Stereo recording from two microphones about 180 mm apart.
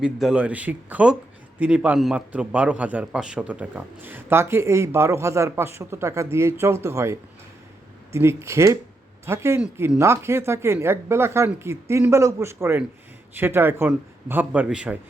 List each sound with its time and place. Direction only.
0.0 s a man's voice: 5° right (ahead or behind)